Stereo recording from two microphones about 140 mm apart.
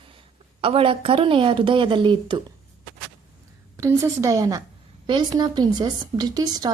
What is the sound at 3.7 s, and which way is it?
A woman's voice, 20° right (ahead or behind).